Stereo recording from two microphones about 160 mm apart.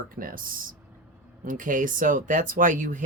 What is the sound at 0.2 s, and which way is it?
Speech, 60° right (ahead or behind).